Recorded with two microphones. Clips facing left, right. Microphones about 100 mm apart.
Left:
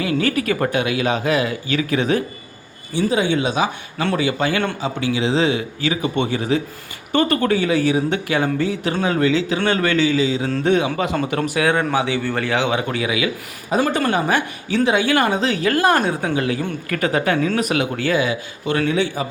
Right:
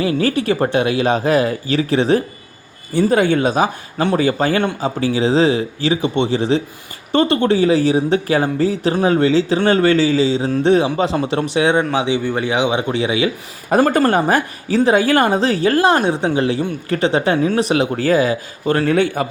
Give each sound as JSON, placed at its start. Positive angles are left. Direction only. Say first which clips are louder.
{"t": 0.0, "sound": "speech", "louder": "right 3 dB", "side_deg": -35}
{"t": 2.9, "sound": "a man's voice", "louder": "right 4 dB", "side_deg": -50}
{"t": 13.7, "sound": "a man's voice", "louder": "right 5 dB", "side_deg": -50}